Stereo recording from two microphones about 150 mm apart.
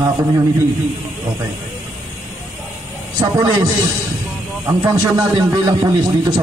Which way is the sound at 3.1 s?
25° right (ahead or behind).